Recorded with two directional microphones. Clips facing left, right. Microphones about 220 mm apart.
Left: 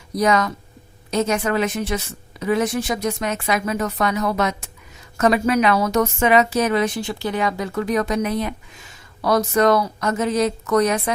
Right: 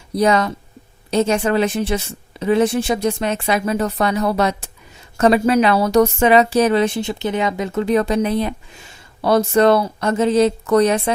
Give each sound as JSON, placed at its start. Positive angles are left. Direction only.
{"t": 0.1, "sound": "a woman's voice", "side_deg": -30}